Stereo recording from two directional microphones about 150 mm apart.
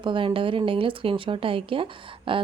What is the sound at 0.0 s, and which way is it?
Speech, 35° right (ahead or behind).